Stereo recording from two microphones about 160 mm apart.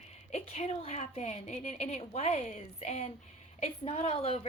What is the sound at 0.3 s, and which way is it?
A woman's voice, 40° left (ahead or behind).